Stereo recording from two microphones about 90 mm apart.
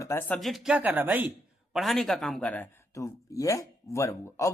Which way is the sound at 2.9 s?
35° left (ahead or behind).